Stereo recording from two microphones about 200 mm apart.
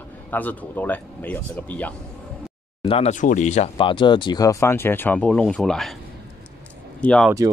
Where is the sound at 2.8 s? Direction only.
30° left (ahead or behind); by 6.0 s centre (ahead or behind).